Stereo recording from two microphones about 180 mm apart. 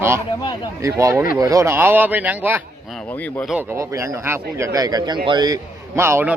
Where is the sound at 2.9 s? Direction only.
10° left (ahead or behind).